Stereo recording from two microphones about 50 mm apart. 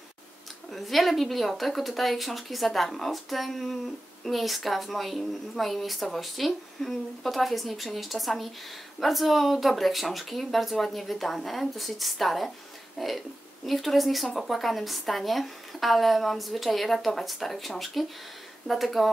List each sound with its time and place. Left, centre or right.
0.7 s a woman's voice: centre